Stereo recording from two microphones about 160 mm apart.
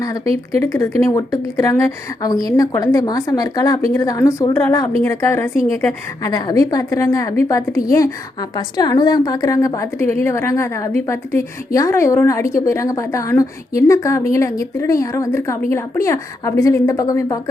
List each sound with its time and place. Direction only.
0.0 s a woman's voice: 20° left (ahead or behind)